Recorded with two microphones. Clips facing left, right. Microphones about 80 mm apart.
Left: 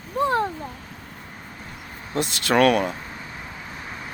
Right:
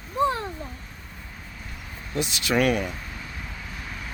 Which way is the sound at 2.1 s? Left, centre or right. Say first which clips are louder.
Left 4 dB; left.